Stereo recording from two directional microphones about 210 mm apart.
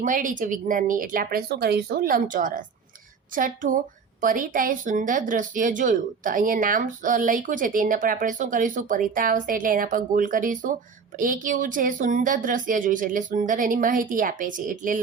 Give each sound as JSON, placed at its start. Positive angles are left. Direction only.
{"t": 0.0, "sound": "speech", "side_deg": -40}